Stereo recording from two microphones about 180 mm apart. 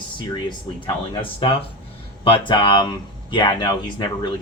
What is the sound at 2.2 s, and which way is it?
Speech, 30° left (ahead or behind).